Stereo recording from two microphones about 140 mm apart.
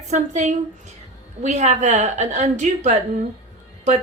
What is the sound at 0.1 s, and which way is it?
A woman's voice, 60° right (ahead or behind).